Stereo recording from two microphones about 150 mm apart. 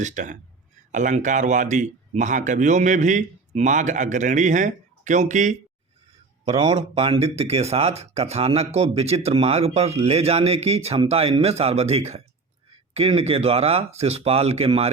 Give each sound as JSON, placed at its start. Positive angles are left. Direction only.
{"t": 0.0, "sound": "speech", "side_deg": -55}
{"t": 6.5, "sound": "speech", "side_deg": -45}